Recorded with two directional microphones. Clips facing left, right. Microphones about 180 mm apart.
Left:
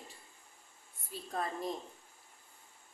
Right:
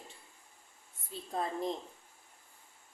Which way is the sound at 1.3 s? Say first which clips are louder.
Right 2 dB; 20° right (ahead or behind).